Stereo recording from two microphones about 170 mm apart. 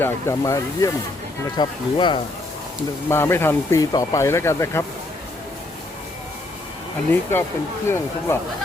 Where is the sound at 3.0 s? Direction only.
15° left (ahead or behind).